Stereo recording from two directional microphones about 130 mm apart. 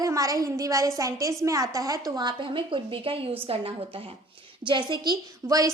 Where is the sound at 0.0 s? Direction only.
25° right (ahead or behind).